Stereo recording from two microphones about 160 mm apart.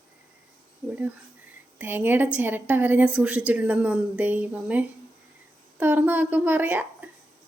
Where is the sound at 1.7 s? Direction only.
10° right (ahead or behind).